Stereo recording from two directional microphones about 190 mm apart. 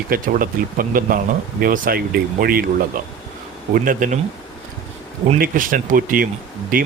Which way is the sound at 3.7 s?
45° right (ahead or behind).